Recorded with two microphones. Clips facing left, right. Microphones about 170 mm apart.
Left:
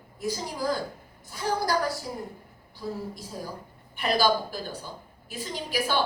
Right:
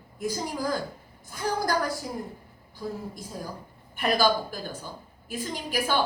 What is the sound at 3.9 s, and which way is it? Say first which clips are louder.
A woman's voice: even; 45° right (ahead or behind).